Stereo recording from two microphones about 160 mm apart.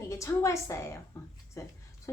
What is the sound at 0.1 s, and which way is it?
A woman's voice, 20° left (ahead or behind).